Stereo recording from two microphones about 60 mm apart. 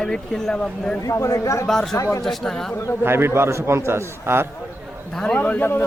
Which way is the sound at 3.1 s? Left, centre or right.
Right.